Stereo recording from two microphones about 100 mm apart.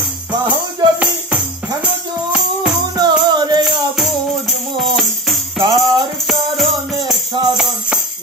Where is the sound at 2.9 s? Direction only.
45° right (ahead or behind).